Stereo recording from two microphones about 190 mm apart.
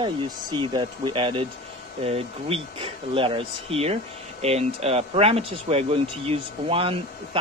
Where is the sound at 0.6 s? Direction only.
25° right (ahead or behind).